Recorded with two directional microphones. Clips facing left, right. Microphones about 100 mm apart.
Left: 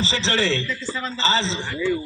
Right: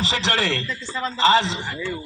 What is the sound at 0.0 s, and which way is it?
A man's voice, 55° right (ahead or behind).